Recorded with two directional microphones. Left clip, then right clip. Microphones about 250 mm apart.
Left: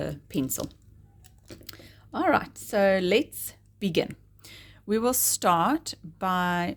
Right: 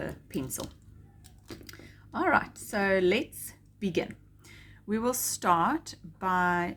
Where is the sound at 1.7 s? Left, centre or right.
Left.